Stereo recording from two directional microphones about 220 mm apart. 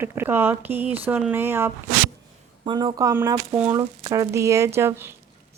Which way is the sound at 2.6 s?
20° right (ahead or behind).